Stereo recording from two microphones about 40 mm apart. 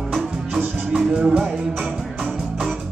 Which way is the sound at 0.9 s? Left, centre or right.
Right.